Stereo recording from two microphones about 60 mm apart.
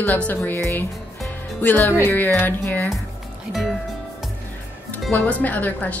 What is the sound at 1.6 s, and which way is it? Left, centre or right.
Speech, left.